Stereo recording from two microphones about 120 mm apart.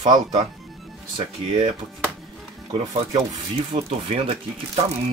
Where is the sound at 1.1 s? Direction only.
55° right (ahead or behind).